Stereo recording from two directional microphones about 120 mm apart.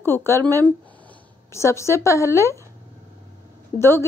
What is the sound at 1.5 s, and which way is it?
Speech, 25° left (ahead or behind).